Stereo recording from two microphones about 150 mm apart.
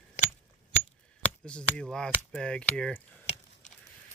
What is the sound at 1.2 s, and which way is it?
Speech, 5° left (ahead or behind).